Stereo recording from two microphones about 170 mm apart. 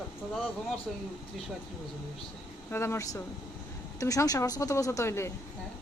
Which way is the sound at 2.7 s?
15° left (ahead or behind).